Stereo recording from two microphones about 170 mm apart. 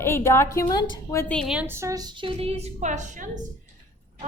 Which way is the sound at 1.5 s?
15° right (ahead or behind).